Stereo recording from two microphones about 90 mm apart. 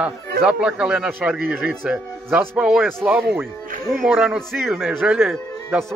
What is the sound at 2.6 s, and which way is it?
Speech, 5° right (ahead or behind).